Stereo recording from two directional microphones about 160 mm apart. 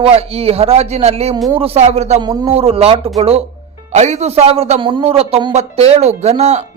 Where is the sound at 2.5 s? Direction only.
40° right (ahead or behind).